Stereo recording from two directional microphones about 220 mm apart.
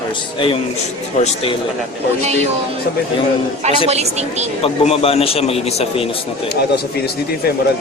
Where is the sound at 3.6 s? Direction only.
30° right (ahead or behind).